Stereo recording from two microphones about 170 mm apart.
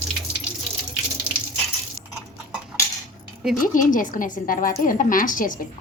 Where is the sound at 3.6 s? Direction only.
50° left (ahead or behind).